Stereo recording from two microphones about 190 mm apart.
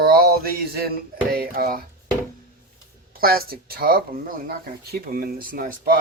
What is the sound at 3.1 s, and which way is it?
Speech, 50° right (ahead or behind).